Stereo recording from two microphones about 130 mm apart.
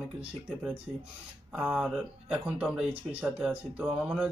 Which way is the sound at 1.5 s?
5° right (ahead or behind).